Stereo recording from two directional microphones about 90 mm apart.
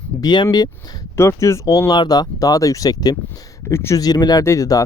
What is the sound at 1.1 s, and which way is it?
Speech, 30° left (ahead or behind).